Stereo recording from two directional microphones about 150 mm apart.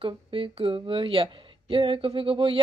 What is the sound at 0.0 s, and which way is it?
A woman's voice, 35° right (ahead or behind).